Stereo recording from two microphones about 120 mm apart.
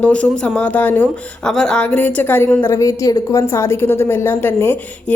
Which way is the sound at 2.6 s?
25° left (ahead or behind).